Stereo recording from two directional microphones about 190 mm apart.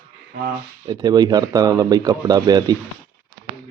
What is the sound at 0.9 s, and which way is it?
A man's voice, 20° right (ahead or behind).